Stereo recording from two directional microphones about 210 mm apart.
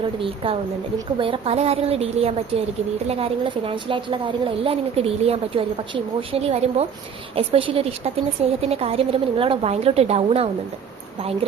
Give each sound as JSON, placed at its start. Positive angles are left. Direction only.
{"t": 0.2, "sound": "a woman's voice", "side_deg": -25}